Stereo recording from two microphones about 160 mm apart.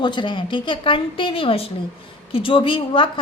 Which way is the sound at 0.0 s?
30° left (ahead or behind).